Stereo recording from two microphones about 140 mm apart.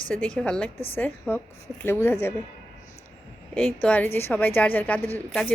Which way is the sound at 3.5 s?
10° left (ahead or behind).